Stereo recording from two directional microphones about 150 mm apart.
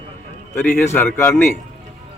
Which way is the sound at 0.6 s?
15° left (ahead or behind).